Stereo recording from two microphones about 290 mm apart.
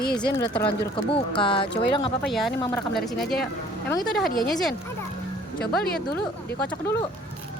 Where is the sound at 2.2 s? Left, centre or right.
Centre.